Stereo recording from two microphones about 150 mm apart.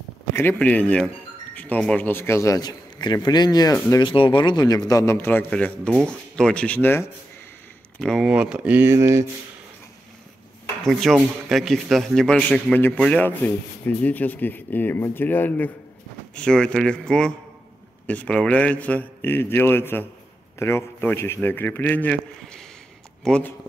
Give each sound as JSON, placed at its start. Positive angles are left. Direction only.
{"t": 0.3, "sound": "a man's voice", "side_deg": 15}
{"t": 8.0, "sound": "a man's voice", "side_deg": 5}
{"t": 10.9, "sound": "a man's voice", "side_deg": 0}